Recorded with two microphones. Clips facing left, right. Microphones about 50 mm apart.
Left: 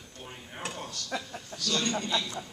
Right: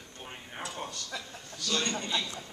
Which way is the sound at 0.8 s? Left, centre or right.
Centre.